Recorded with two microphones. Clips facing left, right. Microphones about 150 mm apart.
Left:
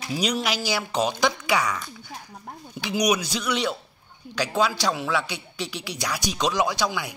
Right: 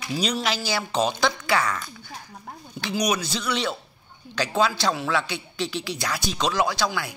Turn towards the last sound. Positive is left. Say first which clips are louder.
# even
turn(degrees=15)  # may be behind; listen again after turning